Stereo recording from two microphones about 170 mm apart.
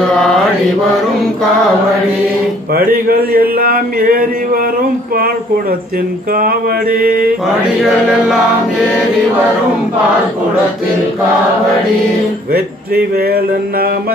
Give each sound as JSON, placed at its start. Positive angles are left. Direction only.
{"t": 0.1, "sound": "mantra", "side_deg": 0}
{"t": 2.7, "sound": "speech", "side_deg": -60}
{"t": 6.3, "sound": "speech", "side_deg": -60}
{"t": 7.4, "sound": "chant", "side_deg": -5}
{"t": 12.5, "sound": "speech", "side_deg": -65}